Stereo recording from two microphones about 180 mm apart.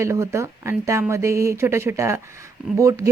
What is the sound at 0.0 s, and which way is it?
Speech, 15° right (ahead or behind).